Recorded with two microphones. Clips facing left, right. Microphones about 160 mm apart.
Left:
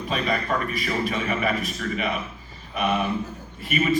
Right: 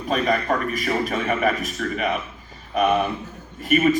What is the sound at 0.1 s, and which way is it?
A man's voice, 45° right (ahead or behind).